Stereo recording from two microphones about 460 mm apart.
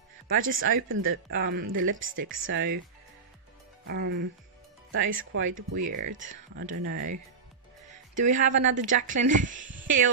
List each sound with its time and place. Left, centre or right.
0.5 s speech: right
3.8 s speech: right
8.1 s speech: centre